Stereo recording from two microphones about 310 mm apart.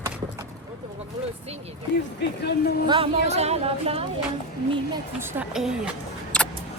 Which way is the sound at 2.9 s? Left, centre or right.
Centre.